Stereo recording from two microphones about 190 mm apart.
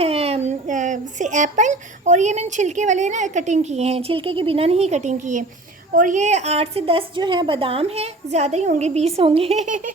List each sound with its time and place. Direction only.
0.0 s a child's voice: 35° right (ahead or behind)